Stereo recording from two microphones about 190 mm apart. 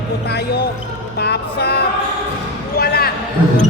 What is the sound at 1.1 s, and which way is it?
Speech, 60° left (ahead or behind).